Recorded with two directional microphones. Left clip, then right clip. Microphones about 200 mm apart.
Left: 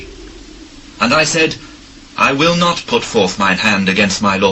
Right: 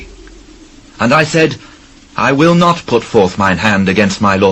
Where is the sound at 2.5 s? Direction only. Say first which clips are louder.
Right 3 dB; 35° right (ahead or behind).